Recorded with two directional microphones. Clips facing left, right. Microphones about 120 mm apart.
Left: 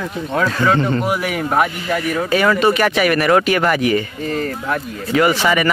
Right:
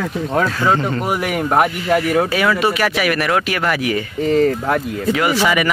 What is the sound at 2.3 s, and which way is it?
Speech, 5° right (ahead or behind).